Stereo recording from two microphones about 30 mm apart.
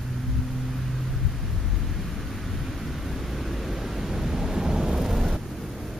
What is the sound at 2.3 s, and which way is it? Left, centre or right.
Vehicle, centre.